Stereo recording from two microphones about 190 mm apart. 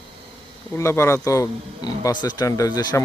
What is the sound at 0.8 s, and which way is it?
A man's voice, 15° left (ahead or behind).